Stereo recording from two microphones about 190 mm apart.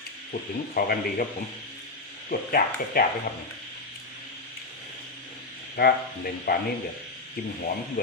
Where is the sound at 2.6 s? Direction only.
45° left (ahead or behind).